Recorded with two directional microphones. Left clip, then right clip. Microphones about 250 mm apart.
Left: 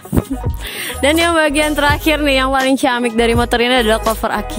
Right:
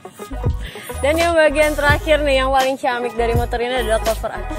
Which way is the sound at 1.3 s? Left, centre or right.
Left.